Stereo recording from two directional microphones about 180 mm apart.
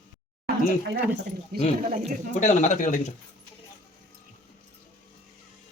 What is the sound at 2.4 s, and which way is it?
Speech, 45° left (ahead or behind).